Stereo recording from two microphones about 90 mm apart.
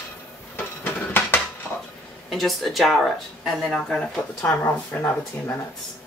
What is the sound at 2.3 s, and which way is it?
Speech, centre (ahead or behind).